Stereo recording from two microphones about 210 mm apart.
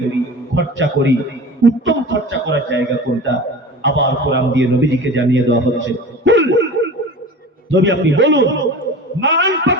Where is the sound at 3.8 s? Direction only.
60° right (ahead or behind).